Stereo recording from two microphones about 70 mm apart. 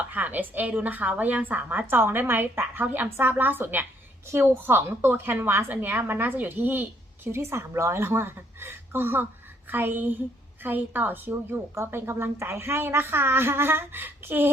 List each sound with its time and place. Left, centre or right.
0.0 s a woman's voice: right